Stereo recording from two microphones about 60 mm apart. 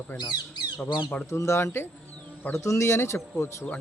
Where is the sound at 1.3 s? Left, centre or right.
Left.